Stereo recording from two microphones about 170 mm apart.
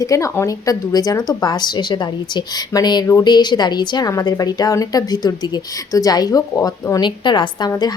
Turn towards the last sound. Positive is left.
turn(degrees=25)  # may be behind; listen again after turning